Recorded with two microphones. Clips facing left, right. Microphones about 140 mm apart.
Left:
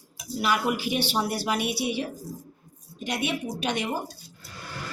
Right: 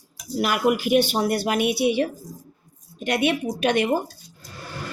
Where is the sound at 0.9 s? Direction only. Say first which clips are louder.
Right 7 dB; 50° right (ahead or behind).